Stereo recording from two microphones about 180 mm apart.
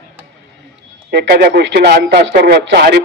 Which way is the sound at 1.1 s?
60° right (ahead or behind).